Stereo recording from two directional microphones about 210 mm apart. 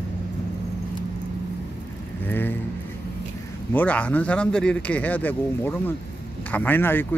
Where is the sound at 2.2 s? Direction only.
10° left (ahead or behind).